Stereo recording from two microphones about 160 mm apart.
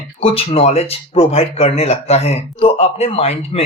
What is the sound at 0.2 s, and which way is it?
Speech, 40° left (ahead or behind).